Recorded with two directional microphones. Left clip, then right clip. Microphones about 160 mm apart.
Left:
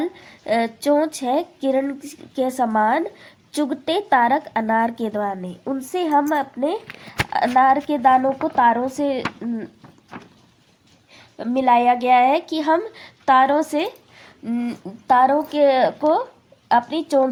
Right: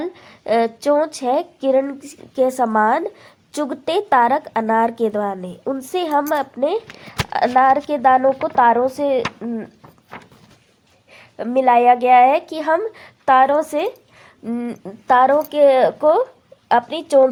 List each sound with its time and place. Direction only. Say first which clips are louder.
0.0 s speech: even; 40° right (ahead or behind)
11.1 s speech: right 4 dB; 45° right (ahead or behind)